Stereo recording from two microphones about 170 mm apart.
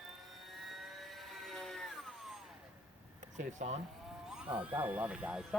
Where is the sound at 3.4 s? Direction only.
45° right (ahead or behind).